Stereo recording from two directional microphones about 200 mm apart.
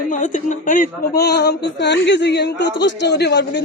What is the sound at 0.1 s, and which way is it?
A man's voice, 40° left (ahead or behind).